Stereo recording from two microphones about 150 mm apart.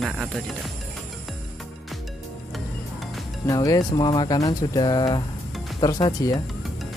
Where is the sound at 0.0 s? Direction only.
Centre (ahead or behind).